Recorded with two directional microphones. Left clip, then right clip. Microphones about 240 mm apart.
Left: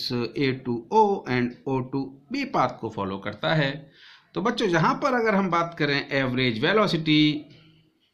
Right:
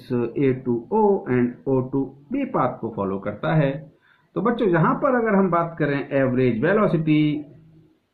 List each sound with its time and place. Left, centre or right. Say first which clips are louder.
0.1 s speech: right 9 dB; left